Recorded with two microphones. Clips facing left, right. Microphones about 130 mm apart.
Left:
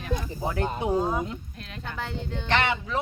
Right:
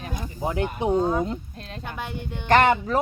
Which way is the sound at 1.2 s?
35° right (ahead or behind).